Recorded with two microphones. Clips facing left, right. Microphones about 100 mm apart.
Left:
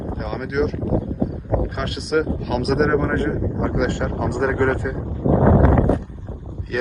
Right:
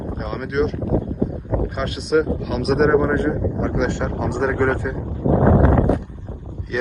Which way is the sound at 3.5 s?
55° left (ahead or behind).